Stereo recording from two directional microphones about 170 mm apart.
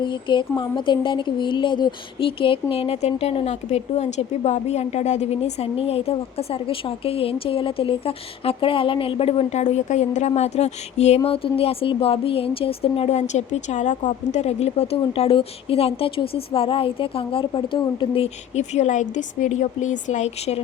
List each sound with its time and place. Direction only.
0.0 s speech: 30° left (ahead or behind)